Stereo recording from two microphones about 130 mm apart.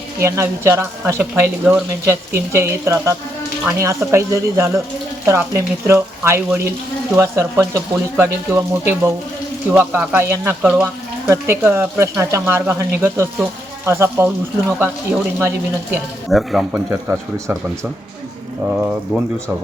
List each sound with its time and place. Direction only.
0.2 s speech: 20° right (ahead or behind)
16.3 s speech: centre (ahead or behind)
16.7 s speech: 15° right (ahead or behind)